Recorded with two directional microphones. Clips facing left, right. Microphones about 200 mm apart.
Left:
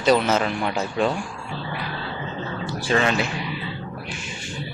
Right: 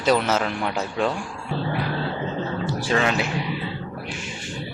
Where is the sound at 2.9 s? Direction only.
5° right (ahead or behind).